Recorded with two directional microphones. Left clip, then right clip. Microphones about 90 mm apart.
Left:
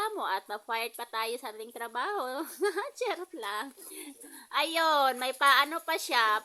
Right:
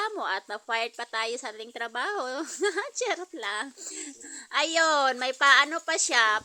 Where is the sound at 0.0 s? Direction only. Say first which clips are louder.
Right 2 dB; 30° right (ahead or behind).